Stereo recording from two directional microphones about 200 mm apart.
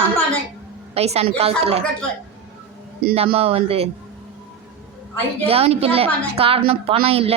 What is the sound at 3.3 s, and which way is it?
Speech, 30° right (ahead or behind).